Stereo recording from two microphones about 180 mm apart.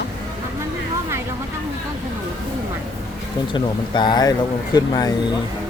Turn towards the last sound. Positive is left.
turn(degrees=20)  # may be behind; listen again after turning